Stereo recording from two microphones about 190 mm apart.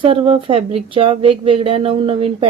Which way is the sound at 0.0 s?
30° right (ahead or behind).